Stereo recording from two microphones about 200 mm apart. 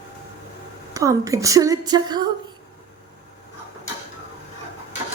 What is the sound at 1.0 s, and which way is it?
A woman's voice, 15° right (ahead or behind).